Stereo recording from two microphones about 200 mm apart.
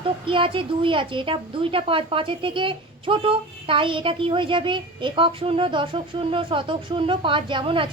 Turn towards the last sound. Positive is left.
turn(degrees=-25)  # may be behind; listen again after turning